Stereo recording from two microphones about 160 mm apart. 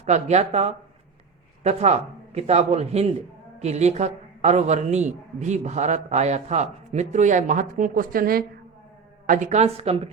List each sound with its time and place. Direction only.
0.0 s a man's voice: 45° right (ahead or behind); by 8.4 s 65° right (ahead or behind)
9.2 s speech: 50° right (ahead or behind)